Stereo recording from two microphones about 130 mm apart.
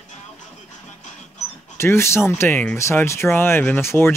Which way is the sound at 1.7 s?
20° left (ahead or behind).